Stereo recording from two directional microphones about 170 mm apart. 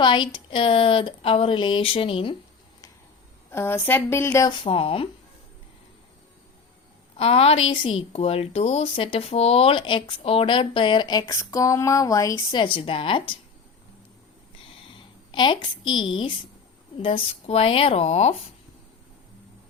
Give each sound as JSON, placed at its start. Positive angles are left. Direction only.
{"t": 0.0, "sound": "speech", "side_deg": 25}
{"t": 3.5, "sound": "speech", "side_deg": 15}
{"t": 4.6, "sound": "speech", "side_deg": 30}
{"t": 7.2, "sound": "speech", "side_deg": 35}
{"t": 15.3, "sound": "a woman's voice", "side_deg": 30}